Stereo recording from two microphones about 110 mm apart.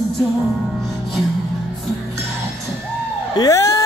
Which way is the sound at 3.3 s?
30° left (ahead or behind).